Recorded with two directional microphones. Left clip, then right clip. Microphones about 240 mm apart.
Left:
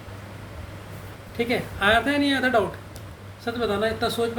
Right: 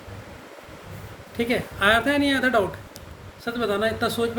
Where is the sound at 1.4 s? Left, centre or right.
Right.